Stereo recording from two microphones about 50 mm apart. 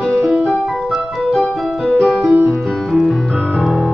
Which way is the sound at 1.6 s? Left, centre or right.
Centre.